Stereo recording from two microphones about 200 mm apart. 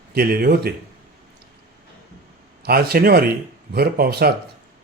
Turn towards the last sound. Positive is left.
turn(degrees=-50)  # may be behind; listen again after turning